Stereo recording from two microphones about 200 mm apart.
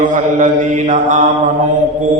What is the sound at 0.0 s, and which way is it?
Mantra, 40° right (ahead or behind).